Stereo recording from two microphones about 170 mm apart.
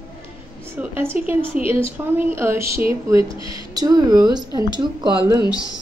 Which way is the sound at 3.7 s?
20° right (ahead or behind).